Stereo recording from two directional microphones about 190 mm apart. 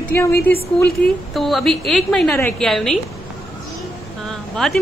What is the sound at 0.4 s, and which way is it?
Speech, 55° left (ahead or behind).